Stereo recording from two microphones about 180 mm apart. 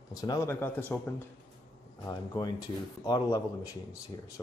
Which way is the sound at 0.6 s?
10° left (ahead or behind).